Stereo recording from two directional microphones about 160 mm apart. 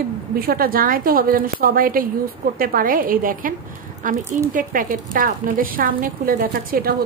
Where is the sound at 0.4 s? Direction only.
70° right (ahead or behind).